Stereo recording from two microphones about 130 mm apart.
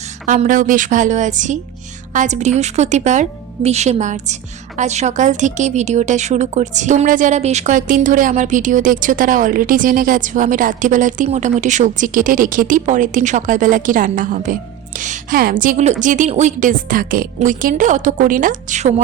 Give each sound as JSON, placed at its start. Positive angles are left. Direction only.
{"t": 0.3, "sound": "a woman's voice", "side_deg": -90}
{"t": 11.3, "sound": "speech", "side_deg": -70}